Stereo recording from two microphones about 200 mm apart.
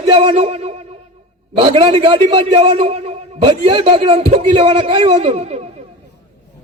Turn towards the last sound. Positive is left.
turn(degrees=-35)  # may be behind; listen again after turning